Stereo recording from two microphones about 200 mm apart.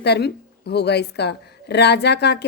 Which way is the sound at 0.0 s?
55° left (ahead or behind).